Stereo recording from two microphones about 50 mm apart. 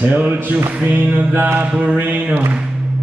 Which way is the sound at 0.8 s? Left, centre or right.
Right.